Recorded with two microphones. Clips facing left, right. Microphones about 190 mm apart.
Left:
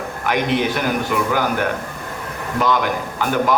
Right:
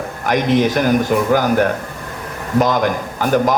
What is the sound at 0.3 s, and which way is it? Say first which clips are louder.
A man's voice: right 4 dB; 40° right (ahead or behind).